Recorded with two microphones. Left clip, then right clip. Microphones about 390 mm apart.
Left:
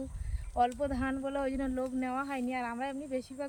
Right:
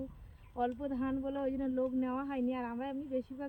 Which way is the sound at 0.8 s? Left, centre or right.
Centre.